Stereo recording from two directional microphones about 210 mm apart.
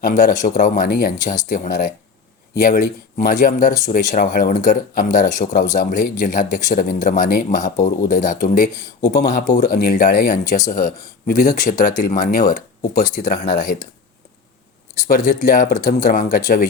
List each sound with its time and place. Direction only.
0.0 s speech: 40° left (ahead or behind)
14.9 s speech: 40° left (ahead or behind)